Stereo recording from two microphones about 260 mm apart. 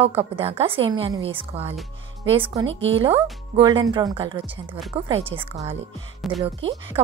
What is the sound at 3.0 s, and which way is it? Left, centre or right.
A woman's voice, centre.